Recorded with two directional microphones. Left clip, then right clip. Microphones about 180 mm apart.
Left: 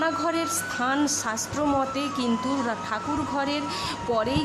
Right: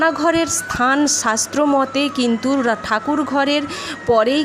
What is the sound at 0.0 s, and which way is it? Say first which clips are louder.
A woman's voice: right 9 dB; 30° right (ahead or behind).